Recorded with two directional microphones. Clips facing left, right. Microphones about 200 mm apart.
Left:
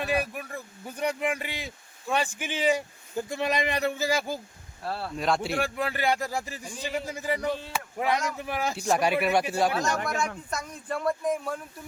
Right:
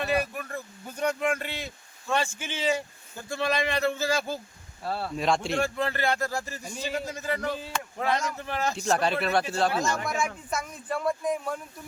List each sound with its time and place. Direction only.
0.0 s speech: 10° left (ahead or behind)
4.8 s speech: centre (ahead or behind)
10.5 s speech: 5° right (ahead or behind)